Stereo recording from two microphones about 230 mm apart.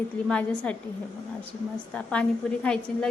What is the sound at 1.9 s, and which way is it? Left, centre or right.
A woman's voice, centre.